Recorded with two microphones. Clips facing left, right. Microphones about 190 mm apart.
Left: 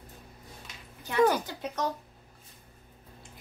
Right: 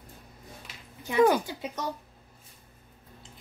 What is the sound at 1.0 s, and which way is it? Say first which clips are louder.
Speech: right 2 dB; 10° right (ahead or behind).